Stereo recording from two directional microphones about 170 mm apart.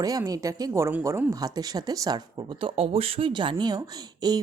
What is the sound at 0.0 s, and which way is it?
A woman's voice, 20° right (ahead or behind).